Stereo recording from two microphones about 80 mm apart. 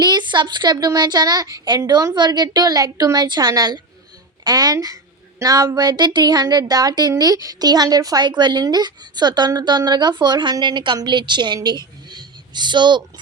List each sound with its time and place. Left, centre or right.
0.0 s a child's voice: right